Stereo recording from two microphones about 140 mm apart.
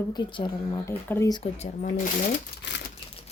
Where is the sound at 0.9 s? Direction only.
15° left (ahead or behind).